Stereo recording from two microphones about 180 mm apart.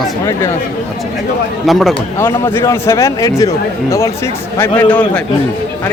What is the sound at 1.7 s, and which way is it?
Speech, centre (ahead or behind).